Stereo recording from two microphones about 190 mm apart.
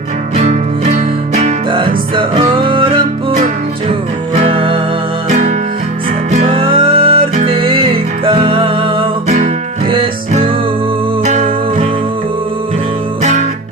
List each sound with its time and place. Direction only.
0.3 s music: 35° right (ahead or behind)
9.9 s music: 30° right (ahead or behind)